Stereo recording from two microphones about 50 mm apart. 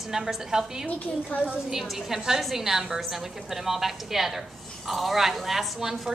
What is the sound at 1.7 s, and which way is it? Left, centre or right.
A woman's voice, centre.